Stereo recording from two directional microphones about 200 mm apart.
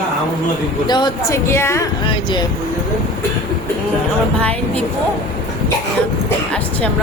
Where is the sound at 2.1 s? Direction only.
25° left (ahead or behind).